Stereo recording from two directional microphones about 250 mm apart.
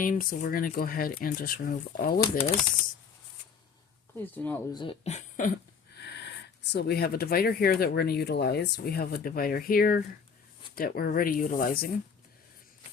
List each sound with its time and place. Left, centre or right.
0.0 s speech: left
4.2 s speech: centre
4.8 s speech: left
6.0 s a sound: left
6.7 s speech: left